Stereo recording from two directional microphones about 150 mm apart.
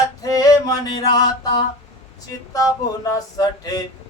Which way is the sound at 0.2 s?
25° left (ahead or behind).